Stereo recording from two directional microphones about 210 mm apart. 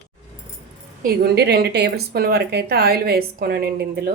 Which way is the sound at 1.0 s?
50° right (ahead or behind).